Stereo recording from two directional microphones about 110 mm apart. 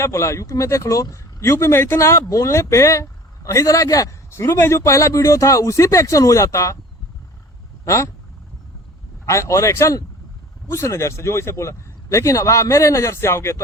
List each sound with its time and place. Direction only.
0.0 s speech: 25° left (ahead or behind)
7.9 s speech: 25° left (ahead or behind)
9.2 s speech: 25° left (ahead or behind)